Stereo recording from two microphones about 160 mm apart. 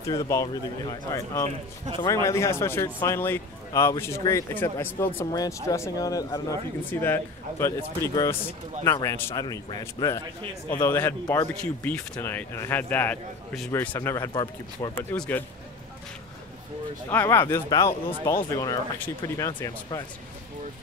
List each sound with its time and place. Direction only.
0.0 s speech: 20° left (ahead or behind)
13.7 s speech: 20° left (ahead or behind)
15.0 s speech: 10° left (ahead or behind)
17.1 s speech: 15° left (ahead or behind)